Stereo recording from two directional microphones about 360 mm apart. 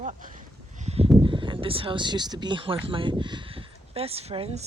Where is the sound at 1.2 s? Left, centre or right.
Centre.